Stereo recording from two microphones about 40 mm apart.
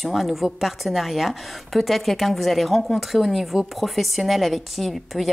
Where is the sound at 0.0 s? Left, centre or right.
Centre.